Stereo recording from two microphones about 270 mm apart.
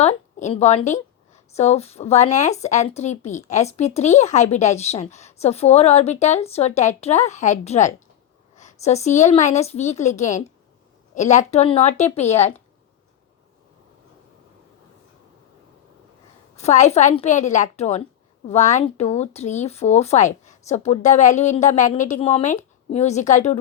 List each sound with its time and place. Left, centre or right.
0.0 s speech: left
16.6 s speech: left